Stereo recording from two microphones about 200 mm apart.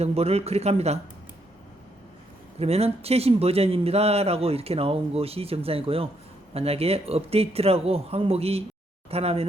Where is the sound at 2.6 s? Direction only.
30° right (ahead or behind).